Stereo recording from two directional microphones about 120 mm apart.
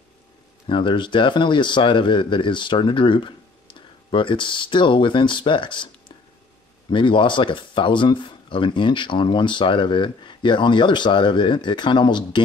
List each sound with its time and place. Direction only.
0.7 s speech: 45° left (ahead or behind)